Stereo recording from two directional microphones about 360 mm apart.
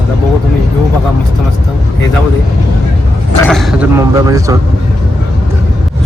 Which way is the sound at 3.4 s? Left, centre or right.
Centre.